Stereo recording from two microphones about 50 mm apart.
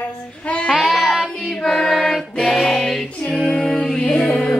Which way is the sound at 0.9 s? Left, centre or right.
Centre.